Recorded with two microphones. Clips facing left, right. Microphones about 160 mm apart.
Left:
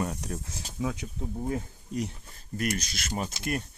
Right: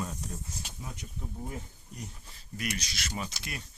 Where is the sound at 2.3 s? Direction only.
50° left (ahead or behind).